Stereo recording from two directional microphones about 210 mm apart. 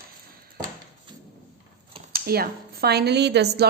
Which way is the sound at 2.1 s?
45° right (ahead or behind).